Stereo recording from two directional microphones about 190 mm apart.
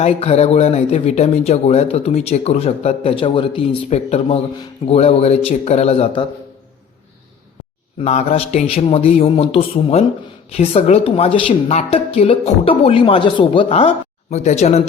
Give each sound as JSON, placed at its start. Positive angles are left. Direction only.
{"t": 0.0, "sound": "speech", "side_deg": 35}
{"t": 8.0, "sound": "speech", "side_deg": 35}